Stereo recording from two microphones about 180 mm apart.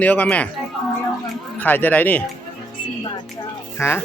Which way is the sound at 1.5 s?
10° left (ahead or behind).